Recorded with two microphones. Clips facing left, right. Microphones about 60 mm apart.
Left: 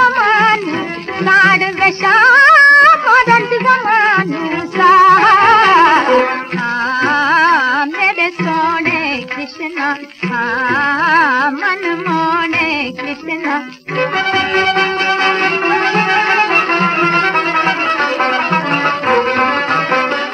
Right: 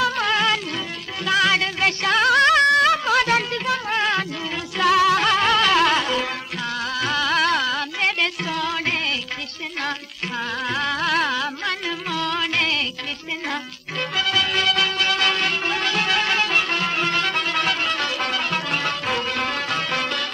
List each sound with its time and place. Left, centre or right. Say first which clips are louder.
0.0 s music: left 11 dB; left